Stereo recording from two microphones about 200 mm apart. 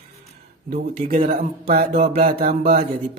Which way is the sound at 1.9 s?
30° right (ahead or behind).